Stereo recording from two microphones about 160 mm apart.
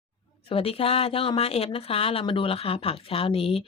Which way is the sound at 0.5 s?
35° left (ahead or behind).